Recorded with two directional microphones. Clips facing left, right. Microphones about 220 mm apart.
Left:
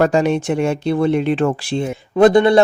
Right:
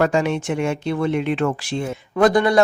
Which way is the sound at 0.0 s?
40° left (ahead or behind).